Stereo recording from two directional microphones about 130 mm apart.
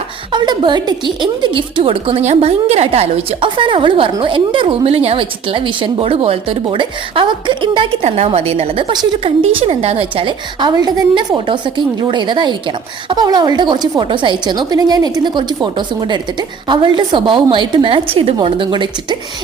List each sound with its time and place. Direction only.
0.3 s a woman's voice: 35° right (ahead or behind)
8.0 s a woman's voice: 55° right (ahead or behind)